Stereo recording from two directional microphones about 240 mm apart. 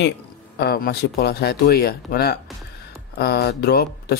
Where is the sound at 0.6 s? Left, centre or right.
Left.